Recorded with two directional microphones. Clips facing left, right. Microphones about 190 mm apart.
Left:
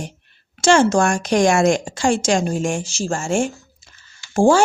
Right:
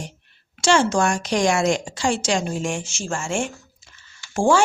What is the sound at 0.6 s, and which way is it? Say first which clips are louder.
Speech: left 4 dB; 45° left (ahead or behind).